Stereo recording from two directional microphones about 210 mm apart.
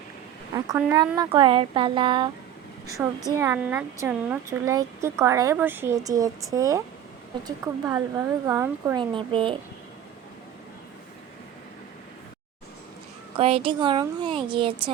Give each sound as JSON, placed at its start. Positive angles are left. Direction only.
{"t": 0.8, "sound": "speech", "side_deg": -15}
{"t": 13.3, "sound": "speech", "side_deg": -25}